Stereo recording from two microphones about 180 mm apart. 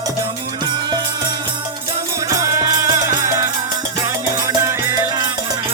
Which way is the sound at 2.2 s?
15° right (ahead or behind).